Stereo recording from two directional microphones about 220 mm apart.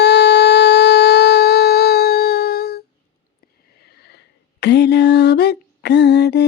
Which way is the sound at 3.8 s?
50° left (ahead or behind).